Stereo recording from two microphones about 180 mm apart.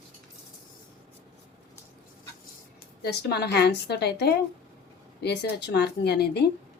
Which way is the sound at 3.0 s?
65° left (ahead or behind).